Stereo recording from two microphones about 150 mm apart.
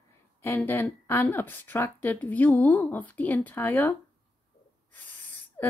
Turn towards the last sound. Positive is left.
turn(degrees=10)  # may be behind; listen again after turning